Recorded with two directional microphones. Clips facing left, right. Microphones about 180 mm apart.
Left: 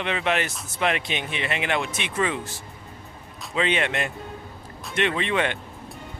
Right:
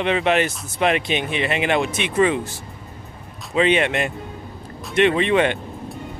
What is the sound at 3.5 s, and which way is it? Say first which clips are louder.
Speech: right 6 dB; 20° right (ahead or behind).